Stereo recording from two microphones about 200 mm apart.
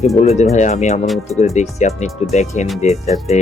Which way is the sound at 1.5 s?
35° left (ahead or behind).